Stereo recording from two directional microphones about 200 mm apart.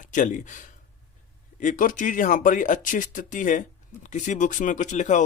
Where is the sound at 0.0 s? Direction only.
40° left (ahead or behind).